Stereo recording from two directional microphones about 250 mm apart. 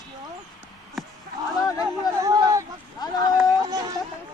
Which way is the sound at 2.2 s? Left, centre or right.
Centre.